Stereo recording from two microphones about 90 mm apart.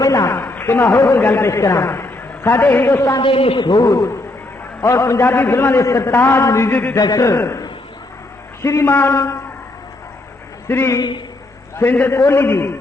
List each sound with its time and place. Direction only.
0.0 s a man's voice: 40° left (ahead or behind)
3.2 s a man's voice: 85° left
3.6 s a man's voice: 50° left (ahead or behind); by 6.9 s 25° left (ahead or behind)
7.0 s a man's voice: 40° left (ahead or behind)
8.6 s a man's voice: 30° left (ahead or behind)
10.7 s a man's voice: 25° left (ahead or behind)
10.9 s a man's voice: 55° left (ahead or behind)
11.8 s a man's voice: 25° left (ahead or behind)